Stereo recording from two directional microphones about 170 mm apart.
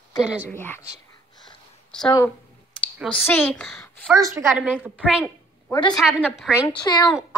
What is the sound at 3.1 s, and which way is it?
Speech, 10° left (ahead or behind).